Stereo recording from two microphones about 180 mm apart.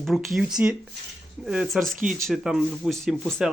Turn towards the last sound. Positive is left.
turn(degrees=0)  # may be behind; listen again after turning